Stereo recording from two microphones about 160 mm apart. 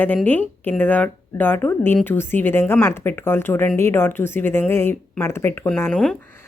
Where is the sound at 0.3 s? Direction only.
10° left (ahead or behind).